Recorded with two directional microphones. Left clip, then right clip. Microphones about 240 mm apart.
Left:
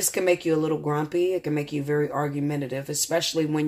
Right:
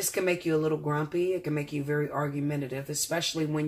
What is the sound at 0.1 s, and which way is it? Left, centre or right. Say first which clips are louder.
Speech: left 5 dB; left.